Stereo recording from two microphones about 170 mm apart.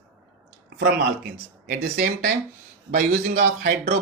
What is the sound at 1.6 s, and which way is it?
Speech, 60° right (ahead or behind).